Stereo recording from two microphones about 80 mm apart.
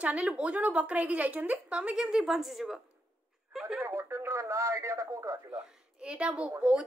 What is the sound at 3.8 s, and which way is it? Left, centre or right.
Speech, right.